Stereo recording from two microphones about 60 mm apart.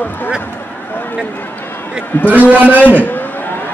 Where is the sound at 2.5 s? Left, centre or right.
Right.